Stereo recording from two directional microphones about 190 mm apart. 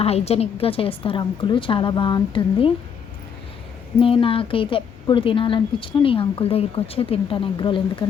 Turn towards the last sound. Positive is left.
turn(degrees=25)  # may be behind; listen again after turning